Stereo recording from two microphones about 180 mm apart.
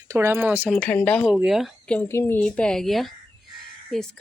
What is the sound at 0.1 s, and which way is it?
Speech, 15° right (ahead or behind).